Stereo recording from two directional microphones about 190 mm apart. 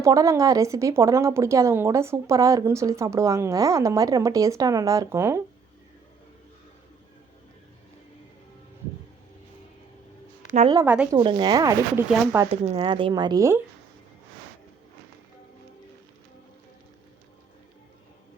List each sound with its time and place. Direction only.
0.0 s speech: 15° right (ahead or behind)
10.8 s speech: 10° right (ahead or behind)
11.2 s speech: 25° right (ahead or behind)
12.5 s speech: 30° right (ahead or behind)